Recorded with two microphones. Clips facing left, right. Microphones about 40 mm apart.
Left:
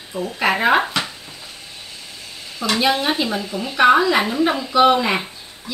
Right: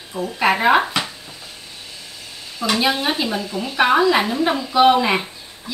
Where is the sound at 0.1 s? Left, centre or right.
Centre.